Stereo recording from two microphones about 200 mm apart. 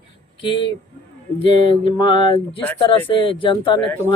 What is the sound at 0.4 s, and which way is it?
Speech, 25° left (ahead or behind).